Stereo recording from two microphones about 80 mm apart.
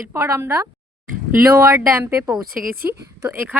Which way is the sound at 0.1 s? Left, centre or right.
Right.